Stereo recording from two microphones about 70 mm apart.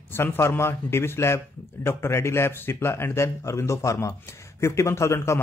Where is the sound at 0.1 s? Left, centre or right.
Left.